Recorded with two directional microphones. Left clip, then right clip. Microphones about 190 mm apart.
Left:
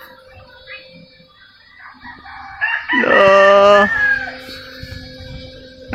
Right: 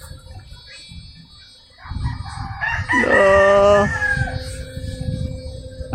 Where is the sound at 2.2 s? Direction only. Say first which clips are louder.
Left 4 dB; 25° left (ahead or behind).